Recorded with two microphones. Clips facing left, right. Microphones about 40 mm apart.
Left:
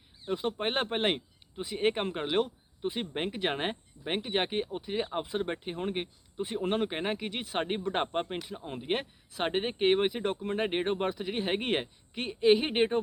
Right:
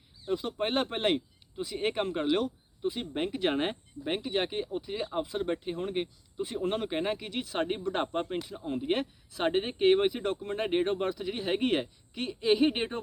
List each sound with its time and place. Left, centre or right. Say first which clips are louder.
0.2 s speech: right 1 dB; left
4.2 s speech: left 3 dB; left